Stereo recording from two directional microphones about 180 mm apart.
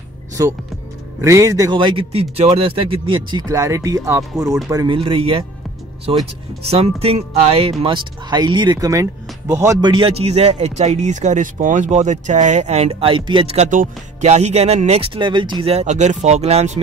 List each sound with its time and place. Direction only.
0.4 s a man's voice: 15° right (ahead or behind); by 16.8 s 40° right (ahead or behind)